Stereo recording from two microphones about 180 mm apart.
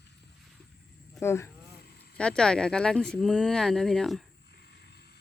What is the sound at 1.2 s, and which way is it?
Speech, 15° left (ahead or behind).